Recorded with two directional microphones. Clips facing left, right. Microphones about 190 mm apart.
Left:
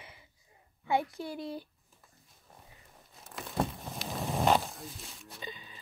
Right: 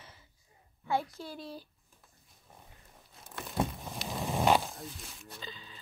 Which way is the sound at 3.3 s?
Centre (ahead or behind).